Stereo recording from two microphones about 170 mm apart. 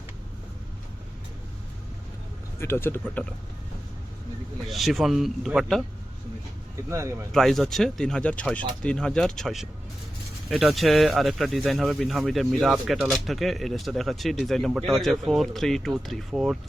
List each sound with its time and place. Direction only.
2.6 s speech: 15° left (ahead or behind)
4.6 s speech: centre (ahead or behind)
6.8 s speech: 15° right (ahead or behind)
7.3 s speech: centre (ahead or behind)